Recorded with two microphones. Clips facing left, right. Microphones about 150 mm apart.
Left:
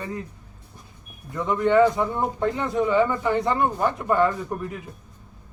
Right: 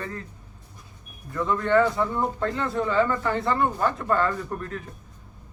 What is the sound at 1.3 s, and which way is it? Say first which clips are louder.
A man's voice: left 2 dB; 15° left (ahead or behind).